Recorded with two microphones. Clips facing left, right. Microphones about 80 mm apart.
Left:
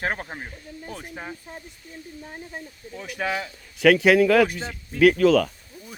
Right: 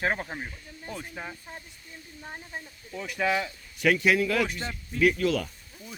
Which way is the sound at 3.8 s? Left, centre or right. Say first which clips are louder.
Left 7 dB; left.